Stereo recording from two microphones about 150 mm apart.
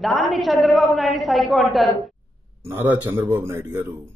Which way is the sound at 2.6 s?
15° right (ahead or behind).